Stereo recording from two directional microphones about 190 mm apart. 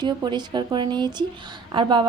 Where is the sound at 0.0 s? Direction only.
25° right (ahead or behind).